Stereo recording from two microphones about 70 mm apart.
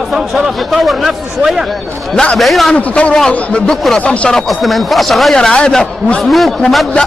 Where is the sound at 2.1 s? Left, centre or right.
Centre.